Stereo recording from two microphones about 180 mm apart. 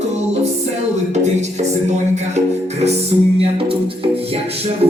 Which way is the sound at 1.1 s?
40° right (ahead or behind).